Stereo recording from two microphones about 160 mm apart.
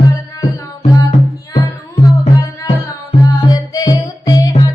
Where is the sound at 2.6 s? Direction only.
25° left (ahead or behind).